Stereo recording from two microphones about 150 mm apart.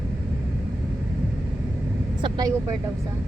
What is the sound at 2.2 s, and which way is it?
Vehicle, 25° right (ahead or behind).